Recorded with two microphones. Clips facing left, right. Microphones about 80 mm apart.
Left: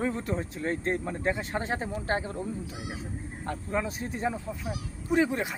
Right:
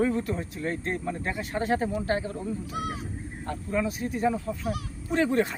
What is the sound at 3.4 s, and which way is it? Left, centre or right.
Speech, left.